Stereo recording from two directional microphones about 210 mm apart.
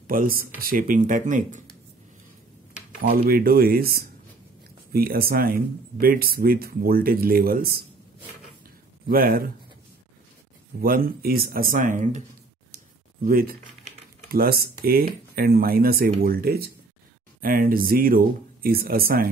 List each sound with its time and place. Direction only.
0.0 s speech: 40° right (ahead or behind)
3.3 s speech: 45° right (ahead or behind)
9.1 s speech: 45° right (ahead or behind)
10.8 s speech: 45° right (ahead or behind)
12.7 s a sound: 45° right (ahead or behind)
14.3 s speech: 45° right (ahead or behind)